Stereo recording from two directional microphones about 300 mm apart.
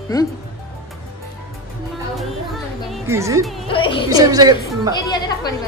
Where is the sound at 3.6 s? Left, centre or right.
Centre.